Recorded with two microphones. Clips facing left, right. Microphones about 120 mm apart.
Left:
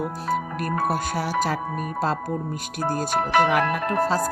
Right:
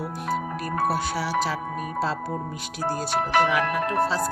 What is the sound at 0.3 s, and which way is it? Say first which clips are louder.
Music: even; 50° left (ahead or behind).